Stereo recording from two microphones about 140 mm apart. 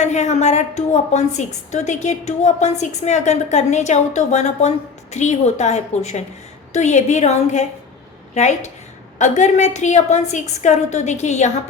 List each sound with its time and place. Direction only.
0.0 s a woman's voice: 55° left (ahead or behind)